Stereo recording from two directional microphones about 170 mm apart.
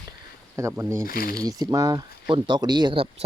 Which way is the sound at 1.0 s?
60° left (ahead or behind).